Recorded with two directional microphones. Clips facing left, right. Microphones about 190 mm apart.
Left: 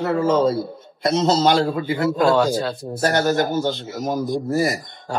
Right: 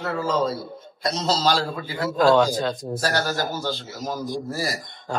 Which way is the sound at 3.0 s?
20° left (ahead or behind).